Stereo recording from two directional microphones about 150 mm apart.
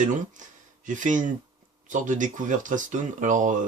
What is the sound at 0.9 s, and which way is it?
Speech, 55° right (ahead or behind).